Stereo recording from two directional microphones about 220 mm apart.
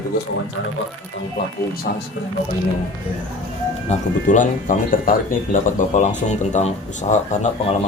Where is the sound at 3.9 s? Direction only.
35° left (ahead or behind).